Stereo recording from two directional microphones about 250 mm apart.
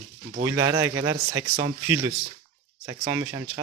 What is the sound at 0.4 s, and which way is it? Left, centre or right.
Speech, centre.